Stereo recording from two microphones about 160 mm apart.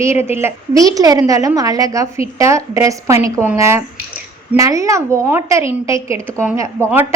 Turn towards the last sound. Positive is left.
turn(degrees=-15)  # may be behind; listen again after turning